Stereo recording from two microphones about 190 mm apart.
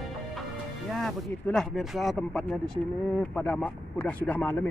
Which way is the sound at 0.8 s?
Centre (ahead or behind).